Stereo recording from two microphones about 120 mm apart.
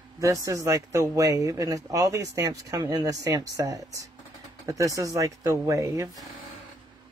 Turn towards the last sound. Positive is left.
turn(degrees=-25)  # may be behind; listen again after turning